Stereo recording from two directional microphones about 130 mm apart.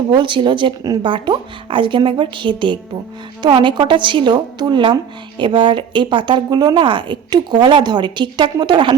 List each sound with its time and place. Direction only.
0.1 s a woman's voice: 40° right (ahead or behind)